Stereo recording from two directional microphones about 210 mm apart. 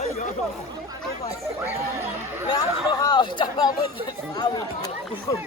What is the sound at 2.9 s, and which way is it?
Speech, 20° left (ahead or behind).